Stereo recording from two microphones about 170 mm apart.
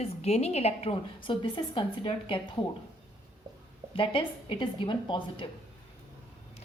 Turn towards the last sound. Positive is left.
turn(degrees=30)  # may be behind; listen again after turning